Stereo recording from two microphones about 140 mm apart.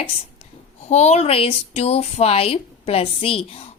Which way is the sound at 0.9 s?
50° left (ahead or behind).